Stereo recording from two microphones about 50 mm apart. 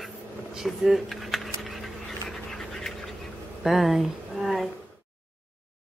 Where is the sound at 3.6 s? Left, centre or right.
Centre.